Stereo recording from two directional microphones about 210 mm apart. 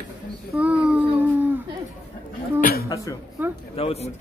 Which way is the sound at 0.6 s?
5° right (ahead or behind).